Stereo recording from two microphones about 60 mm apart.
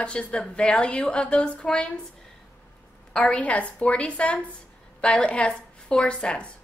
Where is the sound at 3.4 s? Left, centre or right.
Left.